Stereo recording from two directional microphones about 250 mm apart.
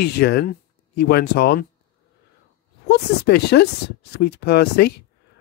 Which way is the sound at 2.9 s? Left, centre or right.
Left.